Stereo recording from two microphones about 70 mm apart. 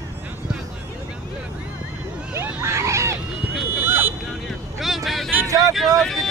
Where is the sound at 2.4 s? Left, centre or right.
Right.